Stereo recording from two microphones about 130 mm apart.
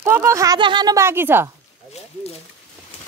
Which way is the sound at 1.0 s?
15° right (ahead or behind).